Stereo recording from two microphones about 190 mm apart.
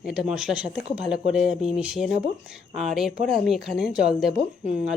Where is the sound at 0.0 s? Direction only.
5° right (ahead or behind).